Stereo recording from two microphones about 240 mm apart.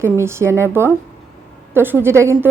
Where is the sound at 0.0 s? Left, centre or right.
Centre.